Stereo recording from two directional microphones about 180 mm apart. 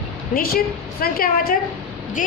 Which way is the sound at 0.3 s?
55° left (ahead or behind).